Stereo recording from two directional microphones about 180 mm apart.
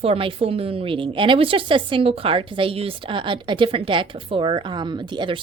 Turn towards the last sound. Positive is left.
turn(degrees=-25)  # may be behind; listen again after turning